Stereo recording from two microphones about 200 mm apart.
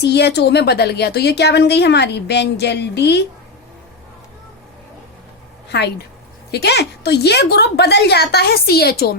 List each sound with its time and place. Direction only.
0.0 s a woman's voice: 55° left (ahead or behind)
6.5 s a woman's voice: 55° left (ahead or behind)